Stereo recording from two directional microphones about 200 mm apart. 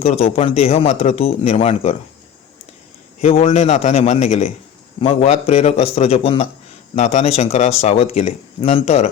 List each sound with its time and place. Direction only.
0.0 s speech: 30° left (ahead or behind)
3.2 s speech: 35° left (ahead or behind)